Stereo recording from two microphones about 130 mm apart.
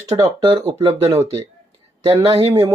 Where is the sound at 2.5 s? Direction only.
30° right (ahead or behind).